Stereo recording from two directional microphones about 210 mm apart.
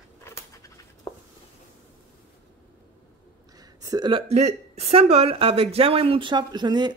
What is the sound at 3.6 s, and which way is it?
A woman's voice, 20° right (ahead or behind).